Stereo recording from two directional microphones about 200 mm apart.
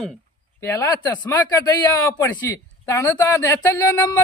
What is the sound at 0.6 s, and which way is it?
A man's voice, 15° left (ahead or behind).